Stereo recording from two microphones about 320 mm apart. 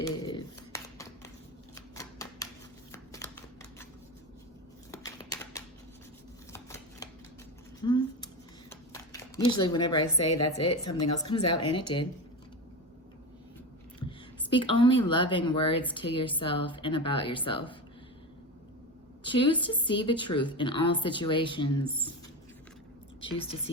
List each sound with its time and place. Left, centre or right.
0.3 s a sound: centre
1.7 s shuffling cards: centre
4.9 s a sound: centre
6.5 s shuffling cards: centre
7.8 s a sound: centre
10.2 s speech: left
11.2 s speech: centre
11.4 s speech: left
14.5 s speech: centre
19.2 s speech: centre
23.2 s speech: centre